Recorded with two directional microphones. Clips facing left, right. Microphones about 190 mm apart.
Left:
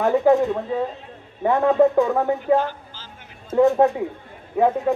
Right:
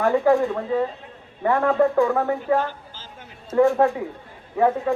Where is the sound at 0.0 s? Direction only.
20° left (ahead or behind).